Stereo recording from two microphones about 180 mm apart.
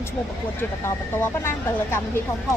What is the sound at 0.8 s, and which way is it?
Speech, 15° left (ahead or behind).